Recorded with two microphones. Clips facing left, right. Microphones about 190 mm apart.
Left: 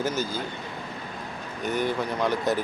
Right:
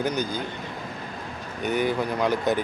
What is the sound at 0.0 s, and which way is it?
Speech, 5° left (ahead or behind).